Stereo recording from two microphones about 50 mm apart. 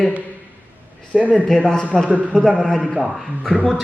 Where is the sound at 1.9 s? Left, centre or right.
Centre.